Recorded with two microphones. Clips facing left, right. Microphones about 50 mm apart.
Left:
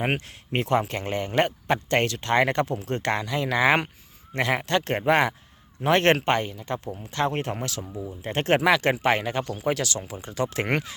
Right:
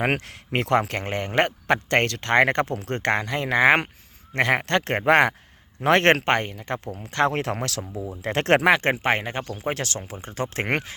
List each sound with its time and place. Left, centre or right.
0.0 s speech: right
4.4 s speech: right
7.3 s speech: right
8.6 s speech: right